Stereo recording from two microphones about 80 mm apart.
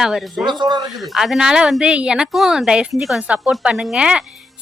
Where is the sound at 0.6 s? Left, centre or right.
Right.